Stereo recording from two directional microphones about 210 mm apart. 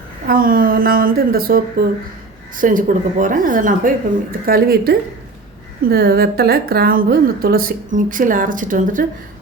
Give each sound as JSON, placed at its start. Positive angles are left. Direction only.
{"t": 0.3, "sound": "a woman's voice", "side_deg": -45}